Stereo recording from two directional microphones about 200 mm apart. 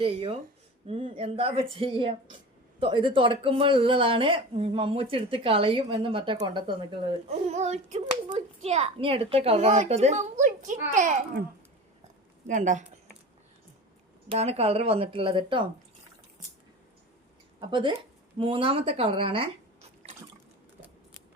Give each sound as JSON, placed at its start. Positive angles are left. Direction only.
{"t": 0.0, "sound": "a woman's voice", "side_deg": -25}
{"t": 12.5, "sound": "speech", "side_deg": -40}
{"t": 14.3, "sound": "a woman's voice", "side_deg": -30}
{"t": 17.6, "sound": "a woman's voice", "side_deg": -25}